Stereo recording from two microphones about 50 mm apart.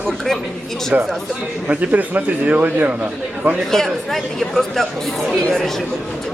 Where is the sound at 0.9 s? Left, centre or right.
Right.